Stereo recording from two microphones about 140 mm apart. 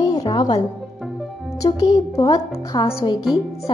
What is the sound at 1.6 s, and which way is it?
A woman's voice, 25° left (ahead or behind).